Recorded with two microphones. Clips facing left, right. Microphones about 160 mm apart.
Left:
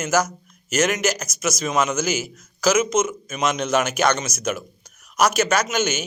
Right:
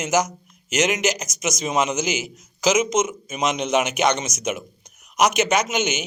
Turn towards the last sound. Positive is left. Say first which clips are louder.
# even
turn(degrees=-15)  # may be behind; listen again after turning